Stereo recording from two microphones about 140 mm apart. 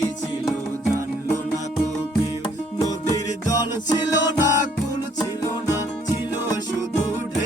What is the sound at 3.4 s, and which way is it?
Music, 25° left (ahead or behind).